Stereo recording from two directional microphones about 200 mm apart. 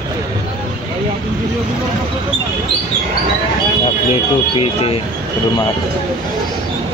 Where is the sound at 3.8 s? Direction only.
30° left (ahead or behind).